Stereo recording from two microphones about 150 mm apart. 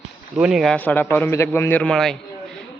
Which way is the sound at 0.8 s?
10° left (ahead or behind).